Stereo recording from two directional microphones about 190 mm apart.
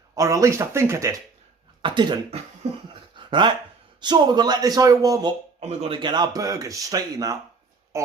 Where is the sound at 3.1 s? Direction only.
25° right (ahead or behind).